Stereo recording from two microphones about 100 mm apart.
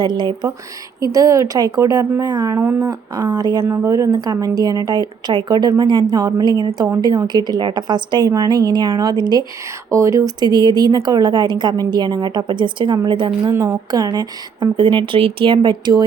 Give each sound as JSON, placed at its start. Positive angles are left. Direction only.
{"t": 0.0, "sound": "a woman's voice", "side_deg": -50}
{"t": 1.0, "sound": "speech", "side_deg": -35}
{"t": 2.6, "sound": "a woman's voice", "side_deg": -30}
{"t": 9.9, "sound": "speech", "side_deg": -30}
{"t": 10.4, "sound": "a woman's voice", "side_deg": -45}
{"t": 13.4, "sound": "speech", "side_deg": -30}
{"t": 14.0, "sound": "a woman's voice", "side_deg": -45}